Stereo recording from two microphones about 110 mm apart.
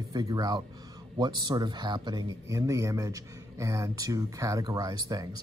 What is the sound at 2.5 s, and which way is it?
Speech, 30° right (ahead or behind).